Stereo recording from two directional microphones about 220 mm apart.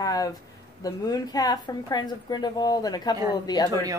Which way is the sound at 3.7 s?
15° right (ahead or behind).